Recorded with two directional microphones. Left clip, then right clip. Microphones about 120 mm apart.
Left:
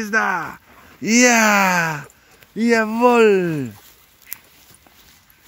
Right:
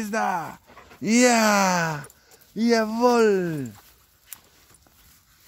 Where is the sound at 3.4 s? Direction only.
20° left (ahead or behind).